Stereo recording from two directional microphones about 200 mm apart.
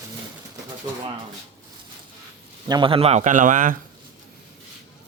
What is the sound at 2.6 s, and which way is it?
A man's voice, 20° right (ahead or behind).